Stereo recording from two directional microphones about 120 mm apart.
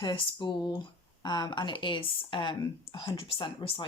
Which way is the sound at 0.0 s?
40° left (ahead or behind).